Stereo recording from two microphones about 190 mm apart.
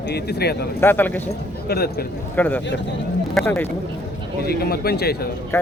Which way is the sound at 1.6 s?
55° left (ahead or behind).